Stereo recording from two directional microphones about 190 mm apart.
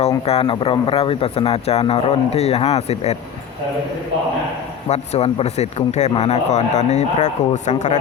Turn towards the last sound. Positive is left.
turn(degrees=40)  # may be behind; listen again after turning